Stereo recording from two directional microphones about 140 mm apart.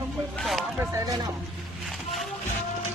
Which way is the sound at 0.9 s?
25° right (ahead or behind).